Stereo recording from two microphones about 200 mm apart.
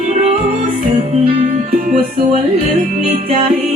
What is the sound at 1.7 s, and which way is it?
Music, 45° right (ahead or behind).